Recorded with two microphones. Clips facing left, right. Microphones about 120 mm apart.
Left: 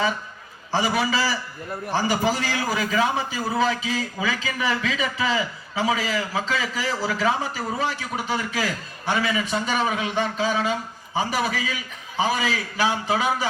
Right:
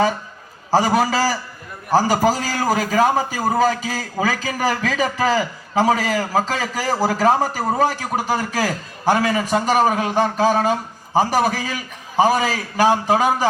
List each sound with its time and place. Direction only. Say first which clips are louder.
0.7 s a man's voice: right 6 dB; 45° right (ahead or behind)